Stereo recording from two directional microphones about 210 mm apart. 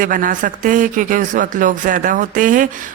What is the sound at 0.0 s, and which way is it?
A man's voice, 40° right (ahead or behind).